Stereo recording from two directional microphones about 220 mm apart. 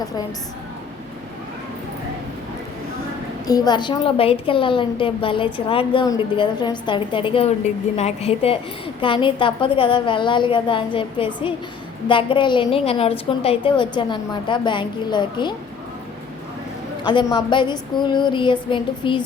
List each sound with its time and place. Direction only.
3.4 s a woman's voice: 15° left (ahead or behind)
17.1 s a woman's voice: 20° left (ahead or behind)